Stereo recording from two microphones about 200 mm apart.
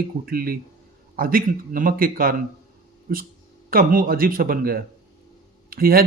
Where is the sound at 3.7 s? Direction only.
45° right (ahead or behind).